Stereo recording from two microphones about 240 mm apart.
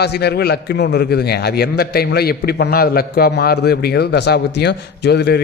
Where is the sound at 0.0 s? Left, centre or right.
Left.